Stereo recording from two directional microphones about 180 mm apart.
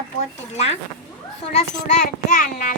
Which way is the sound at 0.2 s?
35° left (ahead or behind).